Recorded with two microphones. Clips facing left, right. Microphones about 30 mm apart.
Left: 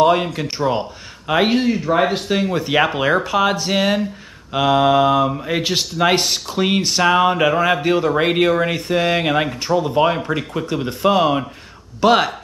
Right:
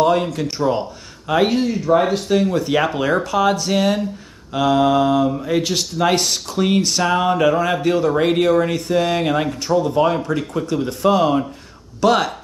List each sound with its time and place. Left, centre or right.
0.0 s speech: left